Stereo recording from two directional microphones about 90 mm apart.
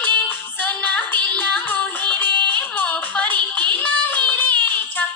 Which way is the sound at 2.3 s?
55° right (ahead or behind).